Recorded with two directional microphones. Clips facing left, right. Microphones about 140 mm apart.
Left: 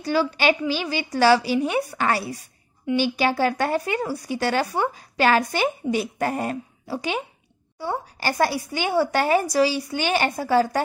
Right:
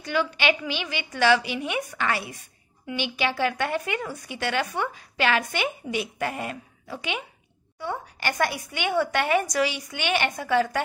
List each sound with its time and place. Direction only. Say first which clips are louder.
0.0 s speech: left 4 dB; 35° left (ahead or behind)